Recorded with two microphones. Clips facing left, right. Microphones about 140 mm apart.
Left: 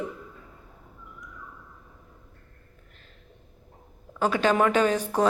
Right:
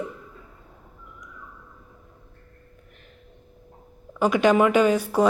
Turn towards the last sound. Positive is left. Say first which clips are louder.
# right 4 dB
turn(degrees=-10)  # may be behind; listen again after turning